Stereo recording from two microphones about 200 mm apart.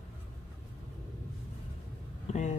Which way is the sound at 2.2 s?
35° left (ahead or behind).